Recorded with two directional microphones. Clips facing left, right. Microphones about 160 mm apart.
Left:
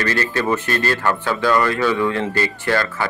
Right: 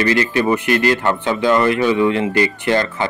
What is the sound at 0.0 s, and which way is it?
Speech, 15° right (ahead or behind).